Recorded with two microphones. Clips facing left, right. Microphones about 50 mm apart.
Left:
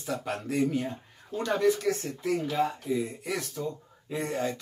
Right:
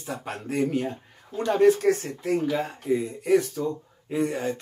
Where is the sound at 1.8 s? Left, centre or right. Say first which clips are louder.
Right 6 dB; right.